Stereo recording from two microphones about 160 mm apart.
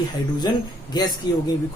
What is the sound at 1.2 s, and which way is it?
Speech, 25° left (ahead or behind).